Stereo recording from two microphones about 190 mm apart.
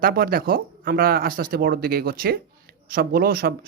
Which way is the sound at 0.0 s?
50° right (ahead or behind).